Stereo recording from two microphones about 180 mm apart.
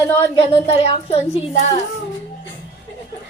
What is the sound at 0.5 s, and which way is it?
Speech, 35° left (ahead or behind).